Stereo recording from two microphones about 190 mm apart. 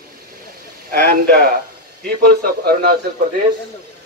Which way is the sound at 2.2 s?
55° right (ahead or behind).